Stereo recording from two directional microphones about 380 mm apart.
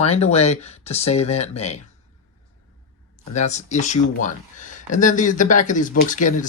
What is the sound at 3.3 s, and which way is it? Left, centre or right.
Speech, centre.